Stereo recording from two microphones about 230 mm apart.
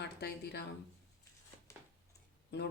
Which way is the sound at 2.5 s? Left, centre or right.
Left.